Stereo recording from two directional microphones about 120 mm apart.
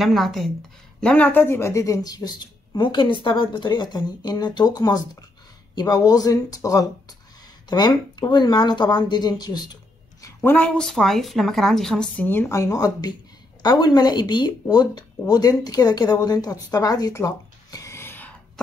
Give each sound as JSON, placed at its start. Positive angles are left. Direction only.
{"t": 0.0, "sound": "a woman's voice", "side_deg": 0}
{"t": 10.2, "sound": "a woman's voice", "side_deg": 15}
{"t": 12.3, "sound": "speech", "side_deg": 20}
{"t": 16.7, "sound": "a sound", "side_deg": 30}